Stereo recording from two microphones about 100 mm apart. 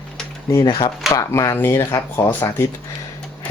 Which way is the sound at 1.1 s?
30° left (ahead or behind).